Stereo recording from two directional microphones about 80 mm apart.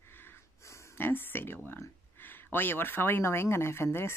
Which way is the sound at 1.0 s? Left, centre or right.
Left.